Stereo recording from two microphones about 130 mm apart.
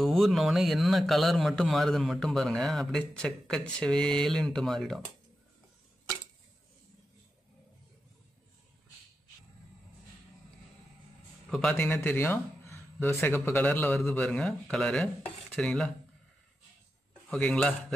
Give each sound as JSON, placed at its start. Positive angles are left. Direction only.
{"t": 0.0, "sound": "speech", "side_deg": 0}
{"t": 11.7, "sound": "speech", "side_deg": 15}
{"t": 17.3, "sound": "speech", "side_deg": 5}